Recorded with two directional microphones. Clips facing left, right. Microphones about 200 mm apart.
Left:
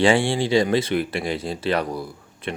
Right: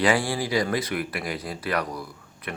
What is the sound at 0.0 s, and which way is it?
Speech, 25° left (ahead or behind).